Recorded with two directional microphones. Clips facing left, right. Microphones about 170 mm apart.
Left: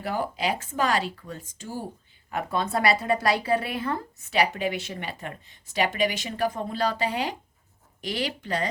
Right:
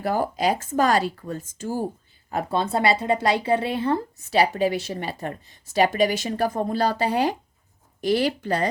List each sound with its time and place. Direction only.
0.0 s speech: 40° right (ahead or behind)
2.3 s speech: 30° right (ahead or behind)